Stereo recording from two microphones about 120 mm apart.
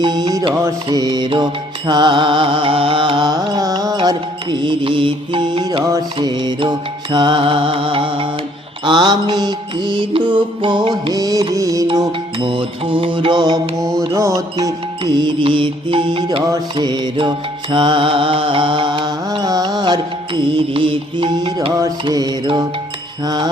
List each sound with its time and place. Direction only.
0.0 s music: 35° right (ahead or behind)
5.8 s music: 30° right (ahead or behind)
6.1 s music: 40° right (ahead or behind)
12.4 s music: 45° right (ahead or behind)